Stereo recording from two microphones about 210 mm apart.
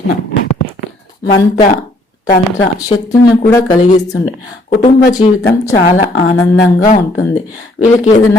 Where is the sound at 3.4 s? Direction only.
15° left (ahead or behind).